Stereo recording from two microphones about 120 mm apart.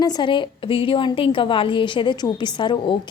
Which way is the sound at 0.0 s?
35° left (ahead or behind).